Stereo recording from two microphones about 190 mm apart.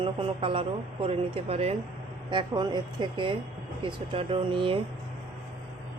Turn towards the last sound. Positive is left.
turn(degrees=-25)  # may be behind; listen again after turning